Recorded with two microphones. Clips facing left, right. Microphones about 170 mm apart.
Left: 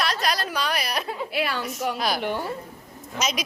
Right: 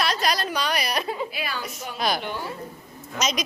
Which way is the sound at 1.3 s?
70° left (ahead or behind).